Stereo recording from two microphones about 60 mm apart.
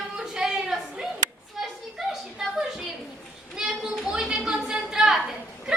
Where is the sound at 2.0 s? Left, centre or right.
Centre.